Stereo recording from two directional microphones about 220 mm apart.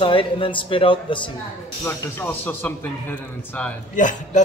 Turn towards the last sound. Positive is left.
turn(degrees=35)  # may be behind; listen again after turning